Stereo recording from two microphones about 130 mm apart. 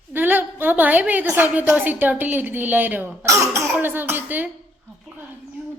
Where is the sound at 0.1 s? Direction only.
15° right (ahead or behind).